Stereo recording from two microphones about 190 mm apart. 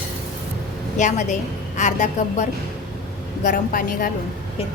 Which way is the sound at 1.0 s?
40° left (ahead or behind).